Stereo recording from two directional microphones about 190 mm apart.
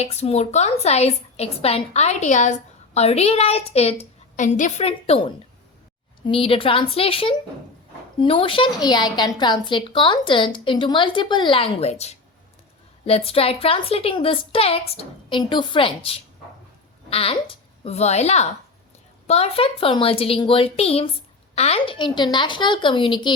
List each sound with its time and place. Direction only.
0.0 s a woman's voice: 35° left (ahead or behind)
6.2 s a woman's voice: 30° left (ahead or behind)